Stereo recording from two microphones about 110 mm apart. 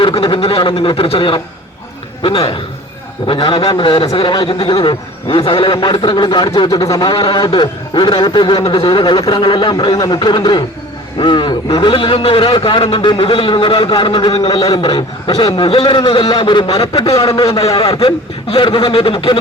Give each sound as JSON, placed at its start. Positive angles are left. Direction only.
{"t": 0.0, "sound": "a man's voice", "side_deg": 50}
{"t": 14.8, "sound": "a man's voice", "side_deg": 50}
{"t": 18.4, "sound": "speech", "side_deg": 55}